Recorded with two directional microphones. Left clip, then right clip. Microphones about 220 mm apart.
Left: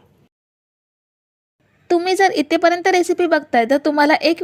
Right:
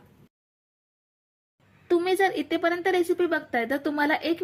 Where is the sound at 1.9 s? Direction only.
35° left (ahead or behind).